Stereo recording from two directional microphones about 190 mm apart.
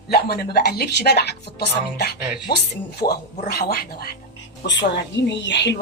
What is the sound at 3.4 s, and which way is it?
Speech, 55° left (ahead or behind).